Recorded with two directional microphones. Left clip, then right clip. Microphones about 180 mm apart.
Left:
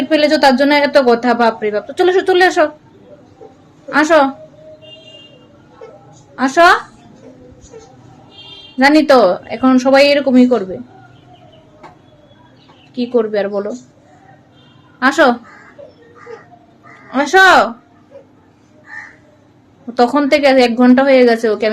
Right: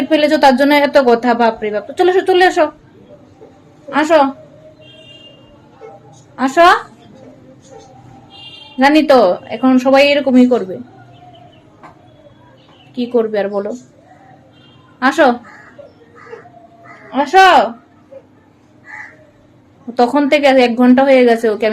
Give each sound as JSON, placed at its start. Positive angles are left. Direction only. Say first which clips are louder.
{"t": 0.1, "sound": "speech", "louder": "right 1 dB", "side_deg": 0}
{"t": 3.8, "sound": "a woman's voice", "louder": "left 1 dB", "side_deg": 10}
{"t": 6.3, "sound": "a woman's voice", "louder": "even", "side_deg": 5}
{"t": 8.8, "sound": "a woman's voice", "louder": "even", "side_deg": 10}
{"t": 12.9, "sound": "speech", "louder": "even", "side_deg": 0}
{"t": 14.9, "sound": "a woman's voice", "louder": "even", "side_deg": 5}
{"t": 17.1, "sound": "speech", "louder": "even", "side_deg": 20}
{"t": 19.9, "sound": "speech", "louder": "even", "side_deg": 5}